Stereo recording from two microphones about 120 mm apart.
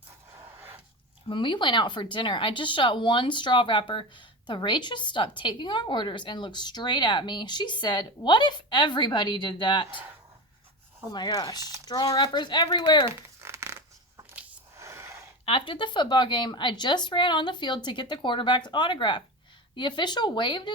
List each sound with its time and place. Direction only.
0.3 s a sound: 20° right (ahead or behind)
1.3 s a woman's voice: 45° left (ahead or behind)
11.1 s a woman's voice: 35° left (ahead or behind)
13.1 s coin: 20° right (ahead or behind)
14.8 s gasp: 25° right (ahead or behind)
15.4 s a woman's voice: 45° left (ahead or behind)